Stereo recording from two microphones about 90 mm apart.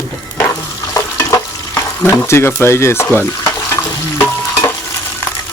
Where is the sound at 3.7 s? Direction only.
25° left (ahead or behind).